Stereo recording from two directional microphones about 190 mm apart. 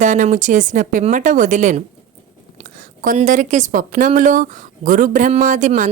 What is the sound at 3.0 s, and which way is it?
A woman's voice, 45° right (ahead or behind).